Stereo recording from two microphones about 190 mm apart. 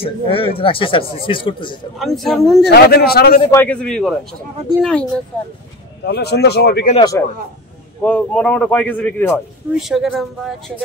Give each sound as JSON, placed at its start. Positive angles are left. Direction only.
{"t": 0.0, "sound": "speech", "side_deg": 30}
{"t": 2.0, "sound": "a man's voice", "side_deg": 0}
{"t": 2.7, "sound": "speech", "side_deg": 55}
{"t": 3.5, "sound": "a man's voice", "side_deg": 5}
{"t": 5.3, "sound": "a man's voice", "side_deg": 5}
{"t": 6.0, "sound": "speech", "side_deg": 60}
{"t": 7.0, "sound": "speech", "side_deg": 20}
{"t": 8.0, "sound": "speech", "side_deg": 5}
{"t": 9.8, "sound": "a man's voice", "side_deg": 0}